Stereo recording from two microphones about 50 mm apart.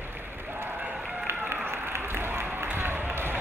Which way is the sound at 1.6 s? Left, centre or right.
Right.